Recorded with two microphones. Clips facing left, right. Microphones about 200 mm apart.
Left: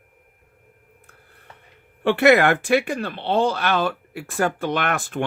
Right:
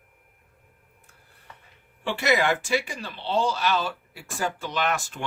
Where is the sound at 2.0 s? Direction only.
60° left (ahead or behind).